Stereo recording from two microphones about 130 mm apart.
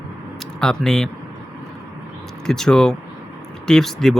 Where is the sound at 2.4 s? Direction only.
5° left (ahead or behind).